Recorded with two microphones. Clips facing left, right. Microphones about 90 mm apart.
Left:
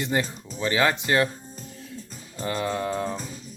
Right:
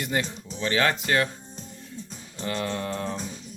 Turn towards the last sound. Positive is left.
turn(degrees=5)  # may be behind; listen again after turning